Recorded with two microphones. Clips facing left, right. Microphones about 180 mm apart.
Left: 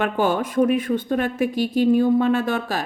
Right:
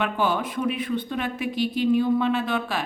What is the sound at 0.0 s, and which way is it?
A woman's voice, 45° left (ahead or behind).